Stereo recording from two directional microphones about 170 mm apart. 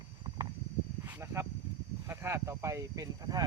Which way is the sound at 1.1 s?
15° right (ahead or behind).